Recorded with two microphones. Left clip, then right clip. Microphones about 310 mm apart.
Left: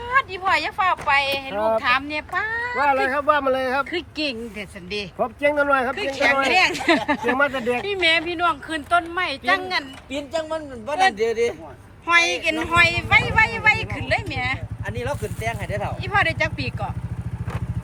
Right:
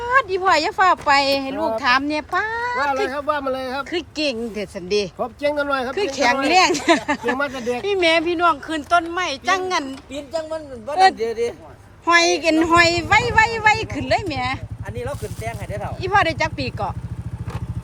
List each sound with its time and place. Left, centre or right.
0.0 s speech: centre
10.1 s speech: centre
12.0 s speech: centre
14.8 s speech: left
16.0 s speech: centre